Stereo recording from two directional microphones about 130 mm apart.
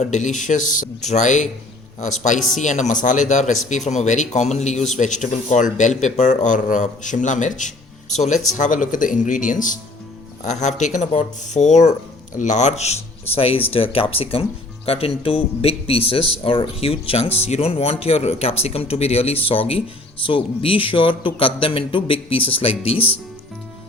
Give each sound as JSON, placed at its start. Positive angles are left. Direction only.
{"t": 0.0, "sound": "speech", "side_deg": 65}
{"t": 8.1, "sound": "speech", "side_deg": 60}
{"t": 8.5, "sound": "speech", "side_deg": 75}
{"t": 10.4, "sound": "speech", "side_deg": 65}